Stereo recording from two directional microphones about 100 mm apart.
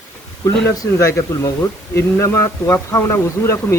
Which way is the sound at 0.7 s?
35° left (ahead or behind).